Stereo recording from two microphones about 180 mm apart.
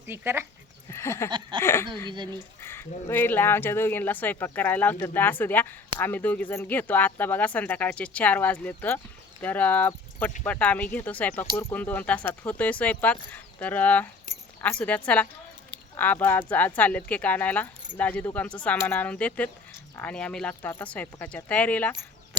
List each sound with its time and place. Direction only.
0.1 s speech: 10° right (ahead or behind)
0.9 s a sound: 15° left (ahead or behind)
1.3 s a sound: 25° right (ahead or behind)
1.6 s speech: 15° left (ahead or behind)
2.0 s speech: 25° right (ahead or behind)
2.6 s speech: 15° left (ahead or behind)